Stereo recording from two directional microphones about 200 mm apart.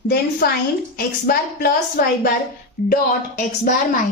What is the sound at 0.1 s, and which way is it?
A woman's voice, 50° left (ahead or behind).